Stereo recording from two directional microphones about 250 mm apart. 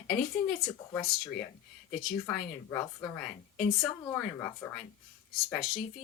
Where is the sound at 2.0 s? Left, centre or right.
Centre.